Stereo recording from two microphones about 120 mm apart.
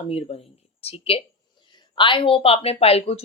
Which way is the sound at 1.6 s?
40° left (ahead or behind).